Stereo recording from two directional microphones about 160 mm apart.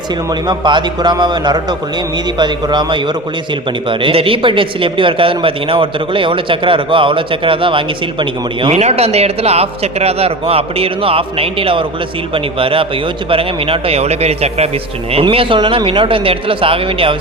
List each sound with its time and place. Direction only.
0.4 s a man's voice: 30° right (ahead or behind)